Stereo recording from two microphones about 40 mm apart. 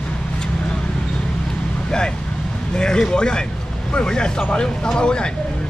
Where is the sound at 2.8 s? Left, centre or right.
Centre.